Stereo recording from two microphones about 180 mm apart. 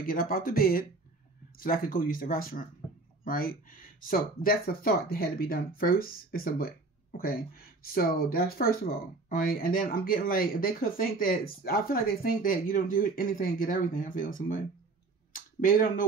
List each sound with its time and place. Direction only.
0.0 s speech: 55° left (ahead or behind)